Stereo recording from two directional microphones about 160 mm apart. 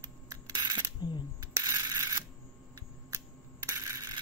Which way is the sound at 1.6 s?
20° right (ahead or behind).